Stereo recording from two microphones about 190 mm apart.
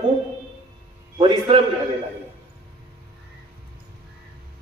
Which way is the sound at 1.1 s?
25° right (ahead or behind).